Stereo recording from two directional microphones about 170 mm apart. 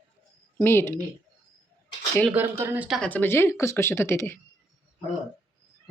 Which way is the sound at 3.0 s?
10° left (ahead or behind).